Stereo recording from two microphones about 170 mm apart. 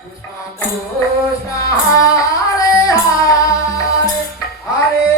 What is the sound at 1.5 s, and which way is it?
Music, 20° left (ahead or behind).